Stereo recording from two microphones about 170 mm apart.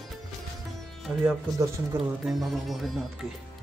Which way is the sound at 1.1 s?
5° right (ahead or behind).